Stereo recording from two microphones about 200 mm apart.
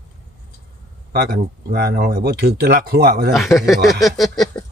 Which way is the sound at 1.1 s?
50° right (ahead or behind).